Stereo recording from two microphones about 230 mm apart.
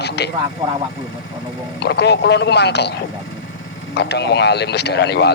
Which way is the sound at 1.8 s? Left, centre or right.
Left.